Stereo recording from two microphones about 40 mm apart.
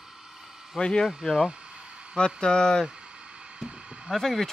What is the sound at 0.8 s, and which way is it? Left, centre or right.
Speech, left.